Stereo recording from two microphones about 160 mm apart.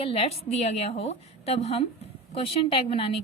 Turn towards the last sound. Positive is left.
turn(degrees=35)  # may be behind; listen again after turning